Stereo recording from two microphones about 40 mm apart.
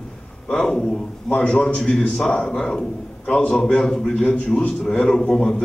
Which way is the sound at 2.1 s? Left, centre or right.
Centre.